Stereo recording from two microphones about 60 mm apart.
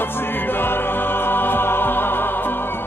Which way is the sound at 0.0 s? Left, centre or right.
Left.